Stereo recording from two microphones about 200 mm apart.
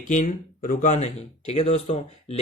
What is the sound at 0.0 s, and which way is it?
Speech, 40° left (ahead or behind).